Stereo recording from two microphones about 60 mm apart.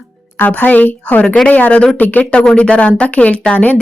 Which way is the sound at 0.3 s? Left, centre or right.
Left.